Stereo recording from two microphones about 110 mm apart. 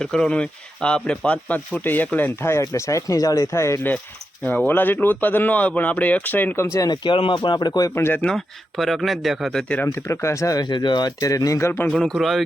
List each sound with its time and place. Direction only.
0.0 s speech: 5° left (ahead or behind)
6.7 s speech: 35° left (ahead or behind)
7.9 s speech: 20° left (ahead or behind)
8.2 s speech: 5° left (ahead or behind)
9.9 s speech: 25° left (ahead or behind)
11.2 s speech: 30° left (ahead or behind)
11.9 s speech: 5° left (ahead or behind)